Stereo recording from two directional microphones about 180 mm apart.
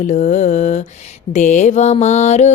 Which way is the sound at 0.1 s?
40° left (ahead or behind).